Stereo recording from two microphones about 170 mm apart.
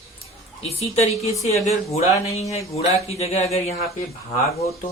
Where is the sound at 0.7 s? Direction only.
35° left (ahead or behind).